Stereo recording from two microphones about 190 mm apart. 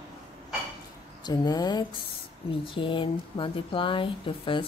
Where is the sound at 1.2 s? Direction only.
20° left (ahead or behind).